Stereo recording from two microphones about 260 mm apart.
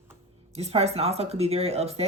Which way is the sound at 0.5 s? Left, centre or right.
Right.